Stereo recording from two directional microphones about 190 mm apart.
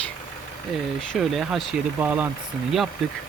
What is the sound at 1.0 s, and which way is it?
Speech, centre (ahead or behind).